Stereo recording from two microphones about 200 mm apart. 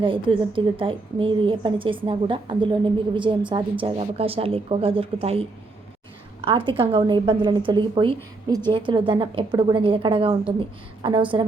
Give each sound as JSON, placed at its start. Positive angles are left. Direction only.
{"t": 0.0, "sound": "a woman's voice", "side_deg": -25}